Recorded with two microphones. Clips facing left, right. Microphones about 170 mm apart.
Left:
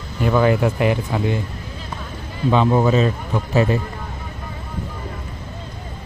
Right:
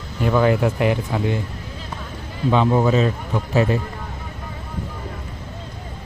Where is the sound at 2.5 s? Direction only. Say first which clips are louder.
Left 1 dB; 30° left (ahead or behind).